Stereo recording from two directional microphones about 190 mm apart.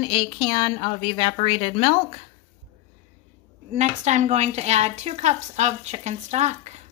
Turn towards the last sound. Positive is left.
turn(degrees=-35)  # may be behind; listen again after turning